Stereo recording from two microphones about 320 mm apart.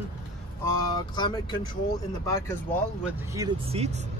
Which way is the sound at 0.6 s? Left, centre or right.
Centre.